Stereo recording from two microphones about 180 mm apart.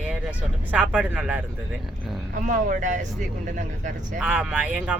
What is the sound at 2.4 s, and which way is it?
Speech, 45° right (ahead or behind).